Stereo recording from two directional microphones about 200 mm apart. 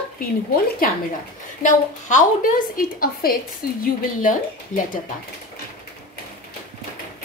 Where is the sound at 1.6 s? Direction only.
40° left (ahead or behind).